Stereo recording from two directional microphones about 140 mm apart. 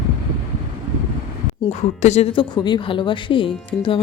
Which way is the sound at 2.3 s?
35° left (ahead or behind).